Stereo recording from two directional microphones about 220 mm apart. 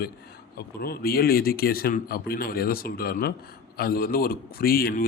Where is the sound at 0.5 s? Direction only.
45° left (ahead or behind).